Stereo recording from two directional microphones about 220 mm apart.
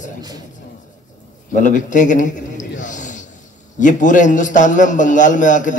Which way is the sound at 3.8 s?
35° left (ahead or behind).